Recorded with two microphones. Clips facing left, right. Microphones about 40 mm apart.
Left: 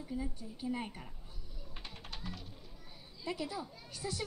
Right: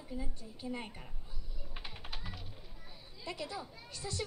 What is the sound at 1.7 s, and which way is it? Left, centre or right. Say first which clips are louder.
Typing: right 2 dB; centre.